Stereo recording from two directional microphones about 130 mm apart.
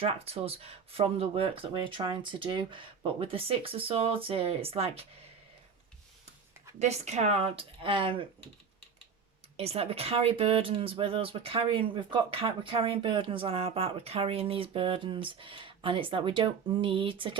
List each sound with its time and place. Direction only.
0.0 s speech: 50° right (ahead or behind)
6.7 s speech: 60° right (ahead or behind); by 8.3 s 40° right (ahead or behind)
9.6 s speech: 50° right (ahead or behind)